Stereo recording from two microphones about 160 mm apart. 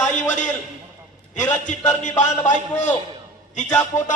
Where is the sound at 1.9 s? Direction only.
50° left (ahead or behind).